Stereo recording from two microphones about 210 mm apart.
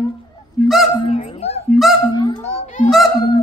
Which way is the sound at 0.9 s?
25° left (ahead or behind).